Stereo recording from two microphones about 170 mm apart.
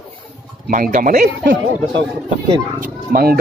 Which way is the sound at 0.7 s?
50° right (ahead or behind).